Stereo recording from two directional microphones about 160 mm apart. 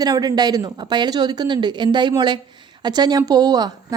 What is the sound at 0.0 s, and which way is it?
A woman's voice, 25° right (ahead or behind).